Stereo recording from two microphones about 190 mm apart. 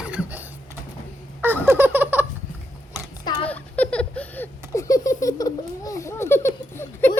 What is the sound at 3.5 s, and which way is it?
Giggle, 5° left (ahead or behind).